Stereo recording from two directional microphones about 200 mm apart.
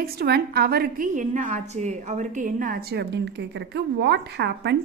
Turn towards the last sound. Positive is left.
turn(degrees=-60)  # may be behind; listen again after turning